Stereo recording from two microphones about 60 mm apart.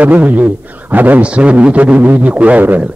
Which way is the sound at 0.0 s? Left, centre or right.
Right.